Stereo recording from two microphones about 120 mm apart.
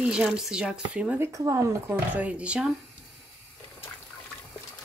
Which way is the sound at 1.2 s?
25° right (ahead or behind).